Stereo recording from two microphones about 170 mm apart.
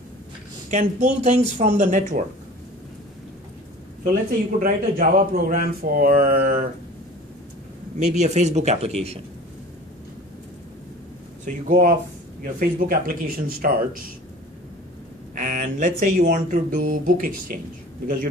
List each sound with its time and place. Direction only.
0.7 s speech: 45° right (ahead or behind)
4.0 s speech: 55° right (ahead or behind)
8.0 s speech: 40° right (ahead or behind)
11.4 s speech: 55° right (ahead or behind)
15.3 s speech: 50° right (ahead or behind)